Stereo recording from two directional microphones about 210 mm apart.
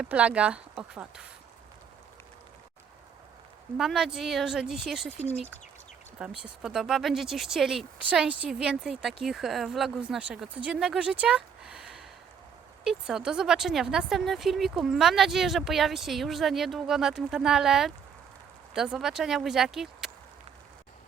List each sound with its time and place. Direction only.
0.0 s speech: 5° right (ahead or behind)
3.8 s speech: centre (ahead or behind)
5.1 s speech: 30° left (ahead or behind)
6.4 s speech: 5° right (ahead or behind)